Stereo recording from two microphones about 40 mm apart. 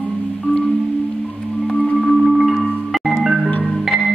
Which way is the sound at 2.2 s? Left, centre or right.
Centre.